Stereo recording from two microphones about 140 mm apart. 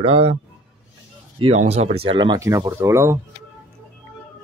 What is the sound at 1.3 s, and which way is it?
Speech, 50° right (ahead or behind).